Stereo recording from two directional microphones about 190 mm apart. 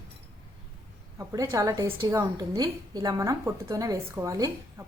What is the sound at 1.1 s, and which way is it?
A woman's voice, 15° right (ahead or behind).